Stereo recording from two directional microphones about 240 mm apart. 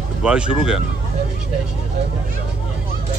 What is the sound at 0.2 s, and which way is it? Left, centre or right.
Speech, centre.